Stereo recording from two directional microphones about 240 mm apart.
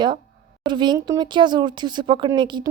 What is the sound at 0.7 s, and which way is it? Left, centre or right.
Speech, centre.